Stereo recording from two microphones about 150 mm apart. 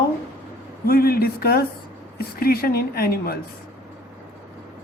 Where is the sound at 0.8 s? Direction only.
80° left.